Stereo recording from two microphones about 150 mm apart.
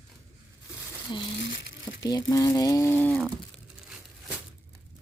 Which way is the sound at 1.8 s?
25° left (ahead or behind).